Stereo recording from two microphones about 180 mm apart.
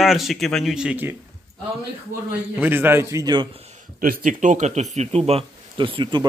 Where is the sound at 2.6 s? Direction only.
10° right (ahead or behind); by 3.8 s 35° right (ahead or behind).